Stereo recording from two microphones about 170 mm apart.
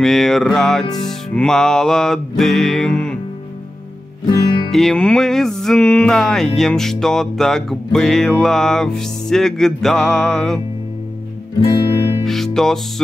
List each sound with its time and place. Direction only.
0.0 s music: centre (ahead or behind)
4.3 s music: 30° left (ahead or behind)
4.6 s music: centre (ahead or behind)
12.3 s music: centre (ahead or behind)